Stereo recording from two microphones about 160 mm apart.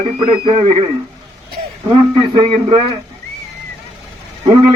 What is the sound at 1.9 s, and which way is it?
Speech, 35° right (ahead or behind).